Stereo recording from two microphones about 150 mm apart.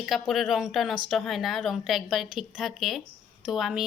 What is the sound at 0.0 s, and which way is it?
A woman's voice, centre (ahead or behind).